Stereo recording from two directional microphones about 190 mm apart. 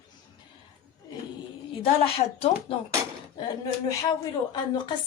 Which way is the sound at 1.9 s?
30° left (ahead or behind).